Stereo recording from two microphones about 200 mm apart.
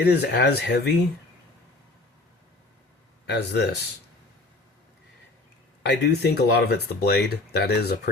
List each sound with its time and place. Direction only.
0.0 s speech: 55° left (ahead or behind)
3.2 s speech: 55° left (ahead or behind)
5.8 s speech: 55° left (ahead or behind)